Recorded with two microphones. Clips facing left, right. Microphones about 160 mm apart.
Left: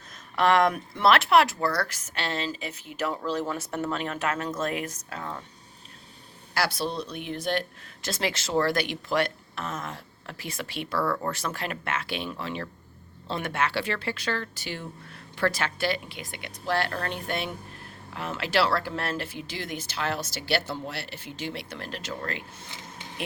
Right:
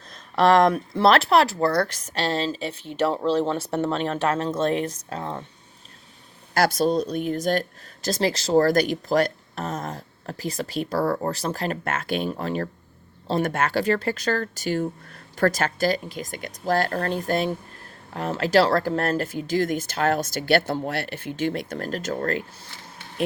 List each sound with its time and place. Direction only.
0.1 s speech: 35° right (ahead or behind)
6.5 s speech: 45° right (ahead or behind)